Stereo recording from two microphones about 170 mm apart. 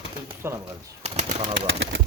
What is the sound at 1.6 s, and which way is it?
Speech, 90° right.